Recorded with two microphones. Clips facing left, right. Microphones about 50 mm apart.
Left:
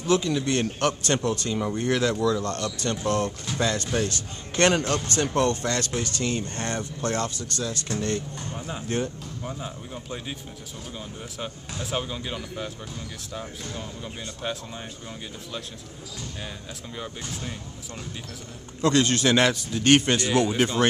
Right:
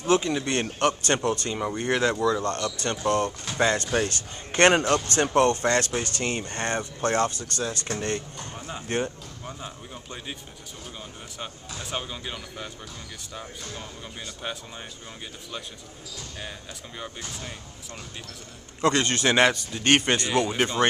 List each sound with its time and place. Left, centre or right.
0.0 s speech: right
0.5 s speech: centre
1.5 s a man's voice: centre
1.9 s speech: right
3.5 s a man's voice: right
6.5 s speech: right
6.8 s a man's voice: right
8.5 s speech: centre
8.8 s speech: right
9.4 s speech: centre
11.3 s speech: centre
16.4 s speech: centre
18.8 s speech: right
19.0 s a man's voice: centre